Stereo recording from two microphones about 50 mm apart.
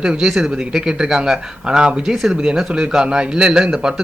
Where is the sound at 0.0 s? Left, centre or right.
Centre.